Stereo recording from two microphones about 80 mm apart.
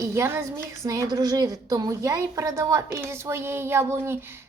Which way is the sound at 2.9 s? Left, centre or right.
Right.